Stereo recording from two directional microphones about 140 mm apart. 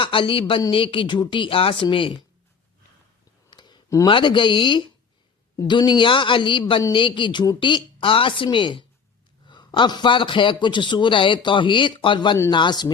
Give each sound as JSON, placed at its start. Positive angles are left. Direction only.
{"t": 0.0, "sound": "a man's voice", "side_deg": 40}
{"t": 3.5, "sound": "a sound", "side_deg": 30}
{"t": 4.0, "sound": "a man's voice", "side_deg": 35}